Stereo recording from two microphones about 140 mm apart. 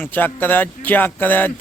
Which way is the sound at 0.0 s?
15° left (ahead or behind).